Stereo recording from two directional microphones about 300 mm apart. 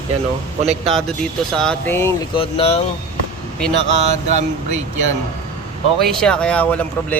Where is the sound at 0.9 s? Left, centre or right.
Centre.